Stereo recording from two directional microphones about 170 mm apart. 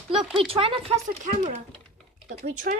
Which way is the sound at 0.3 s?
30° right (ahead or behind).